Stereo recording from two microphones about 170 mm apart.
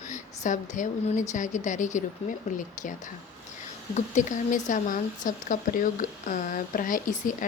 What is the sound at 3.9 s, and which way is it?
A woman's voice, 45° left (ahead or behind).